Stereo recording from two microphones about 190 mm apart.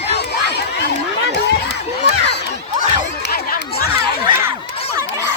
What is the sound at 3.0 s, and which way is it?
Chatter, 60° left (ahead or behind).